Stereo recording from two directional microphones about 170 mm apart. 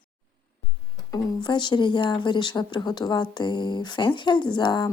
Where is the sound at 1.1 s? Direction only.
25° left (ahead or behind).